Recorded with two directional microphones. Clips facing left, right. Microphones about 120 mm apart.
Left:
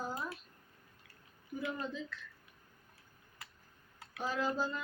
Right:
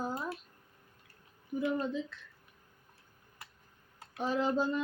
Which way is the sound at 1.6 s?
20° right (ahead or behind).